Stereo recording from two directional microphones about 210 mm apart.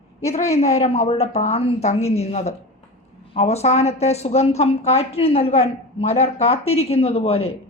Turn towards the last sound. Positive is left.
turn(degrees=30)  # may be behind; listen again after turning